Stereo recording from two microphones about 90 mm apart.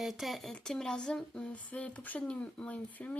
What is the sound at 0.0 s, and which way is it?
Speech, centre (ahead or behind).